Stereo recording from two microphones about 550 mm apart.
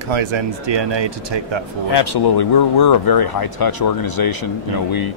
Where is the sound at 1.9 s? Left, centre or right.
Left.